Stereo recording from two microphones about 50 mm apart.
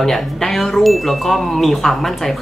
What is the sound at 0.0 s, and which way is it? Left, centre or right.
Speech, centre.